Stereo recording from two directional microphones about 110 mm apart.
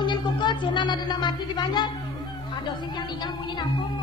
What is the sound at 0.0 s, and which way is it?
Speech, 45° left (ahead or behind).